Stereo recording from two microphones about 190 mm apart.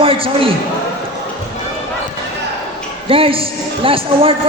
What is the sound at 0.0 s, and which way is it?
Speech, 30° right (ahead or behind).